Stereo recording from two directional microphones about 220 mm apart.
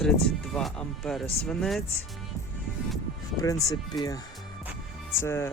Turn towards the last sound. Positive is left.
turn(degrees=10)  # may be behind; listen again after turning